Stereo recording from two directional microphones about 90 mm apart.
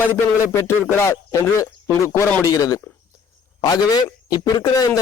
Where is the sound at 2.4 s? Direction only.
40° left (ahead or behind).